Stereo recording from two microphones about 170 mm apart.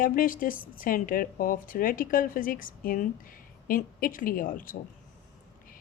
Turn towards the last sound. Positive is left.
turn(degrees=55)  # may be behind; listen again after turning